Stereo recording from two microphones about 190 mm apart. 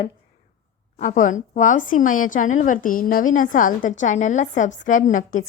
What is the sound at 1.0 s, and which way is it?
A woman's voice, 45° left (ahead or behind).